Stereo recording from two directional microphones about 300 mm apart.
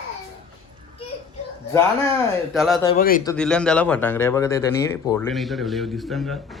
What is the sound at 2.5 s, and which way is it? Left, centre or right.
Speech, centre.